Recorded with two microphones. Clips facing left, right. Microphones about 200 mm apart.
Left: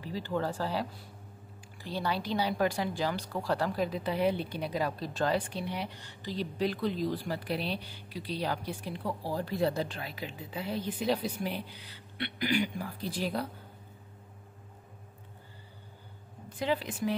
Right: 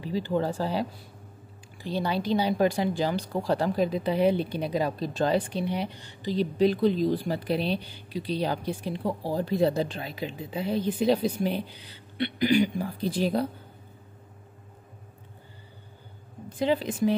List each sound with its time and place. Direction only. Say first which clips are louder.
0.0 s speech: right 6 dB; 20° right (ahead or behind)
16.5 s speech: right 6 dB; 25° right (ahead or behind)